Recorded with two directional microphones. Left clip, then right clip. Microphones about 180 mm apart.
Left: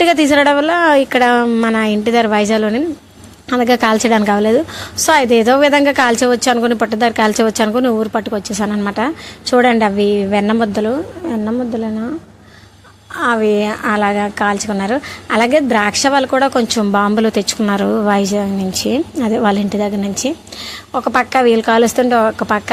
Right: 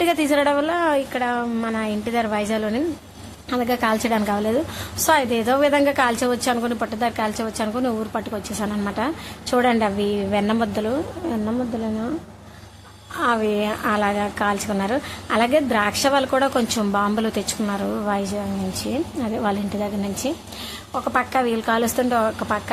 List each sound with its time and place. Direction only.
0.0 s a woman's voice: 35° left (ahead or behind)
13.1 s a woman's voice: 25° left (ahead or behind)